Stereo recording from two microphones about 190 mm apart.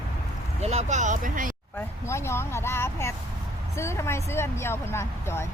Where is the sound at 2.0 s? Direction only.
15° left (ahead or behind).